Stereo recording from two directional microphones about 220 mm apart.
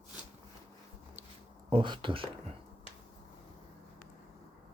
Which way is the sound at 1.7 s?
20° right (ahead or behind).